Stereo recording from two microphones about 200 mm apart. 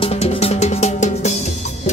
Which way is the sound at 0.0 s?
30° left (ahead or behind).